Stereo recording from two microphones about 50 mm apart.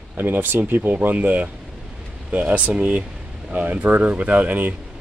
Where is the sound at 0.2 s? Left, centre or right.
Right.